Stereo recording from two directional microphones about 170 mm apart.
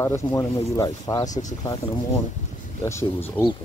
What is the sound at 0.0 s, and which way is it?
Speech, 15° left (ahead or behind).